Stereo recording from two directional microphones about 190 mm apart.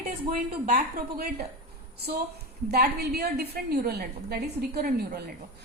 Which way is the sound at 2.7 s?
55° right (ahead or behind).